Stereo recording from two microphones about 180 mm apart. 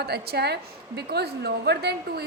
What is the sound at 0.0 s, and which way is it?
A woman's voice, 65° right (ahead or behind).